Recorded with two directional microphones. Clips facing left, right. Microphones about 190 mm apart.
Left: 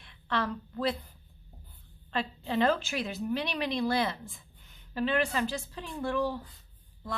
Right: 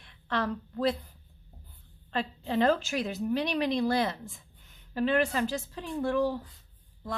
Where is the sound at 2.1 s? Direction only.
40° right (ahead or behind).